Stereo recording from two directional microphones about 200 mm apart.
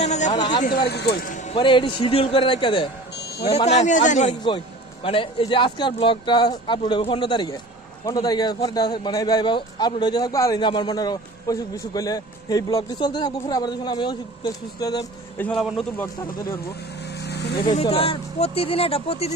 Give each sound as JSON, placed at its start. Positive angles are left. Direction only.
{"t": 0.0, "sound": "a sound", "side_deg": 35}
{"t": 0.3, "sound": "a sound", "side_deg": 20}
{"t": 0.6, "sound": "speech", "side_deg": 50}
{"t": 1.3, "sound": "a man's voice", "side_deg": 25}
{"t": 5.0, "sound": "a man's voice", "side_deg": 25}
{"t": 15.4, "sound": "a man's voice", "side_deg": 5}
{"t": 17.2, "sound": "vehicle", "side_deg": 55}
{"t": 17.6, "sound": "a man's voice", "side_deg": 25}